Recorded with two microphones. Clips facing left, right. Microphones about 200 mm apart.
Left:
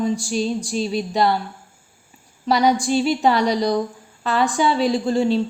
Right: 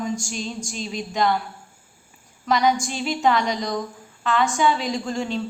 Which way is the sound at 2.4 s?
35° left (ahead or behind).